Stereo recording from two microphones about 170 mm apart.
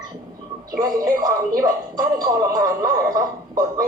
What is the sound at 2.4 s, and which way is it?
Speech, 20° right (ahead or behind).